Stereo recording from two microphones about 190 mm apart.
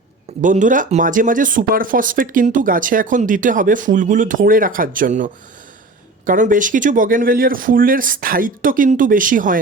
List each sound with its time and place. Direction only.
0.4 s speech: 40° right (ahead or behind)